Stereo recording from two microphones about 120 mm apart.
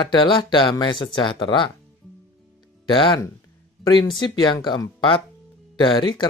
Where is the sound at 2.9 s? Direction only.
40° left (ahead or behind).